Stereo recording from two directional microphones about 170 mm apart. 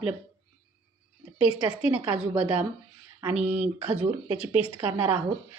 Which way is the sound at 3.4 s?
40° right (ahead or behind).